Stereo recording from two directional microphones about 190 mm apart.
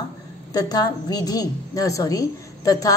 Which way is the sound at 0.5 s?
20° left (ahead or behind).